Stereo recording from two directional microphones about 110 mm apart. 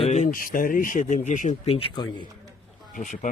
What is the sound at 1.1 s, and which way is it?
Speech, 90° left.